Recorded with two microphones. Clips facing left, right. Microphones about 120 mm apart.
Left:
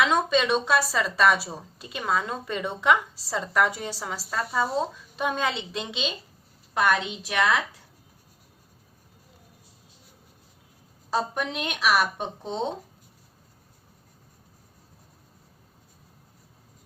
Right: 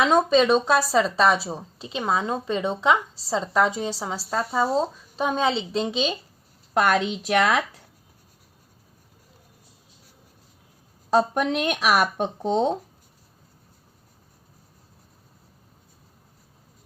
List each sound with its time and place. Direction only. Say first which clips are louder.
0.0 s a woman's voice: right 4 dB; 35° right (ahead or behind)
7.3 s speech: right 3 dB; 60° right (ahead or behind)
11.3 s speech: right 7 dB; 55° right (ahead or behind)